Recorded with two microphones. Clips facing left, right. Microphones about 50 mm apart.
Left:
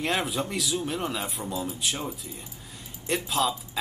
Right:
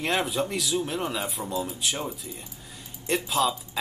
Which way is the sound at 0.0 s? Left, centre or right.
Centre.